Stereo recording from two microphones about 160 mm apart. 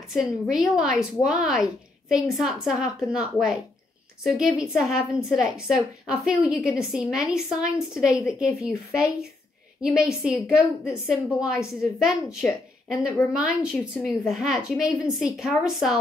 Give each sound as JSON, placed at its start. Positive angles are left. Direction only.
{"t": 0.1, "sound": "a woman's voice", "side_deg": -5}